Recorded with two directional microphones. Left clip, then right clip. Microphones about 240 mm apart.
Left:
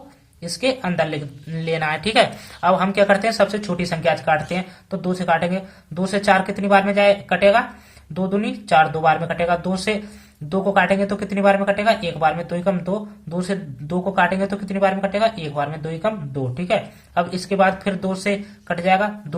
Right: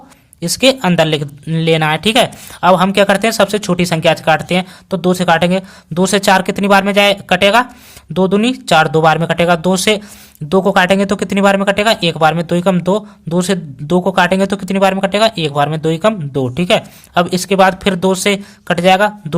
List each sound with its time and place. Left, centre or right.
0.4 s speech: right